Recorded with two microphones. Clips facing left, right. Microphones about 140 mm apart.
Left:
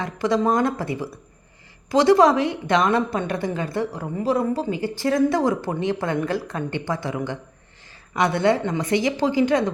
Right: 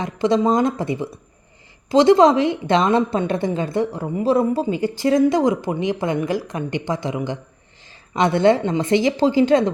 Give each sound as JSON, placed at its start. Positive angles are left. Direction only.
{"t": 0.0, "sound": "a woman's voice", "side_deg": -20}